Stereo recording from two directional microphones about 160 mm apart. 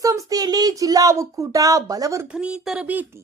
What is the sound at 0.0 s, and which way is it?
Speech, 20° right (ahead or behind).